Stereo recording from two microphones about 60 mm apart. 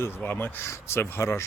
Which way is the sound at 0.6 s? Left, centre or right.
Left.